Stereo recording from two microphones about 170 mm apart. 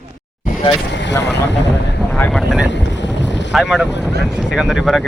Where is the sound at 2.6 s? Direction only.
90° left.